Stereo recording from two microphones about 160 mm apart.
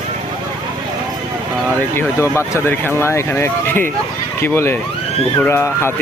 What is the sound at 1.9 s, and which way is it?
Speech, 15° left (ahead or behind).